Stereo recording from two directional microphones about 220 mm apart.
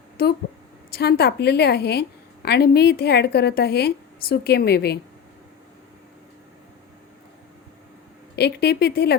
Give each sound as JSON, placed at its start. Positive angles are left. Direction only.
{"t": 0.9, "sound": "a woman's voice", "side_deg": 45}
{"t": 8.4, "sound": "a woman's voice", "side_deg": 45}